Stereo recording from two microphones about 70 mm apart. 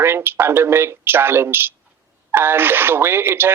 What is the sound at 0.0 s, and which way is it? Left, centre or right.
Speech, right.